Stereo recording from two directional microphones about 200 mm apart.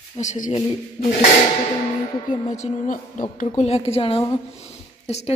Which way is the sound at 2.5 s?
40° left (ahead or behind).